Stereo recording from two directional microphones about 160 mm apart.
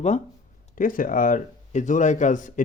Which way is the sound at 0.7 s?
60° left (ahead or behind).